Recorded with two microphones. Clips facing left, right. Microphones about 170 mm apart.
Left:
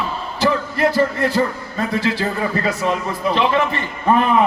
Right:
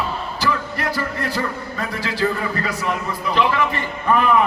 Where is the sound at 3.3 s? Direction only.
25° left (ahead or behind).